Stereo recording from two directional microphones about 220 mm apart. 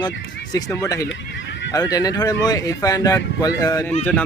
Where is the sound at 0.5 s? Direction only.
15° left (ahead or behind).